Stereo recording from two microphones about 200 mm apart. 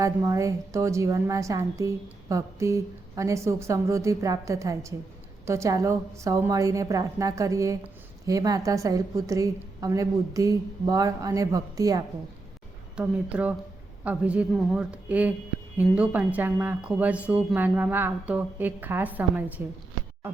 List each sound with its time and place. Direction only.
0.0 s a woman's voice: 15° right (ahead or behind)